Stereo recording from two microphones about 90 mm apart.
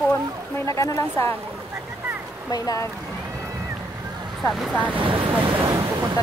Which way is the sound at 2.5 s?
45° left (ahead or behind).